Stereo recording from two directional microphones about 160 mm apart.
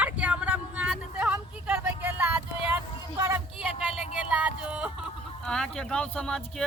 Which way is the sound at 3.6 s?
5° right (ahead or behind).